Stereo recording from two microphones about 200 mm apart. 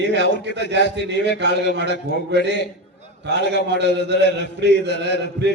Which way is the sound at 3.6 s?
55° right (ahead or behind).